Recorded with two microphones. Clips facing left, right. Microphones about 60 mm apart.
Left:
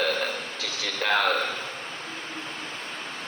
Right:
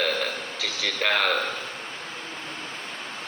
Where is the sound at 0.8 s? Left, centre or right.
Right.